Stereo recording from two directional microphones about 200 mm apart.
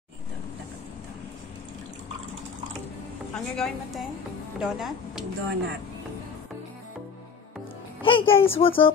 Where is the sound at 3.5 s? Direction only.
Centre (ahead or behind).